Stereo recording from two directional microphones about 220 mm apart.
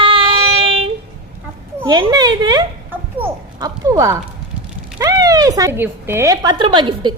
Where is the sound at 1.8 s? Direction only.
20° right (ahead or behind).